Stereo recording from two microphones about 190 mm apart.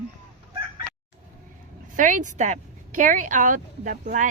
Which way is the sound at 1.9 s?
45° right (ahead or behind).